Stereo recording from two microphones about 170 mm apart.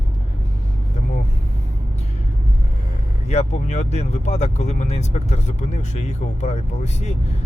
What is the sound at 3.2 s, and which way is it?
Speech, 40° left (ahead or behind).